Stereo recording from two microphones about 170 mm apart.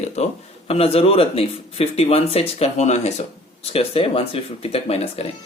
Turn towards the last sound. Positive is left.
turn(degrees=35)  # may be behind; listen again after turning